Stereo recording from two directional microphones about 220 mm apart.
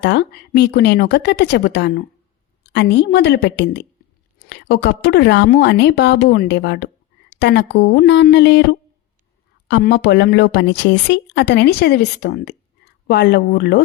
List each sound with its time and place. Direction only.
0.0 s a woman's voice: 50° left (ahead or behind)
9.6 s a woman's voice: 50° left (ahead or behind)